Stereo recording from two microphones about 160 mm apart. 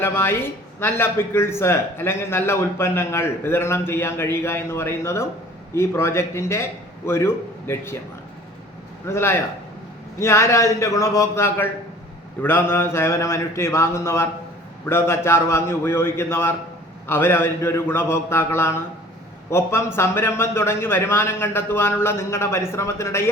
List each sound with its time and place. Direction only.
0.0 s a man's voice: 15° left (ahead or behind)
9.0 s a man's voice: 15° left (ahead or behind)